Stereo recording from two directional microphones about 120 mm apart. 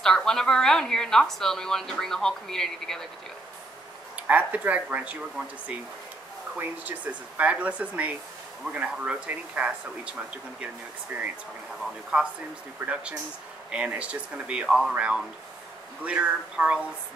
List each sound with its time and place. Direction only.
0.0 s a woman's voice: 5° left (ahead or behind)
4.3 s speech: 15° right (ahead or behind)
6.6 s speech: 15° right (ahead or behind)